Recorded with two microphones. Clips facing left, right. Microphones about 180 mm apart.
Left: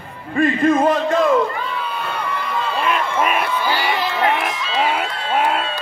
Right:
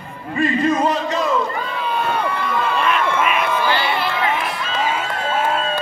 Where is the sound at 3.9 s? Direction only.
40° left (ahead or behind).